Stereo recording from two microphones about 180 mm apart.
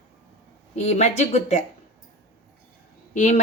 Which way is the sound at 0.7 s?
40° left (ahead or behind).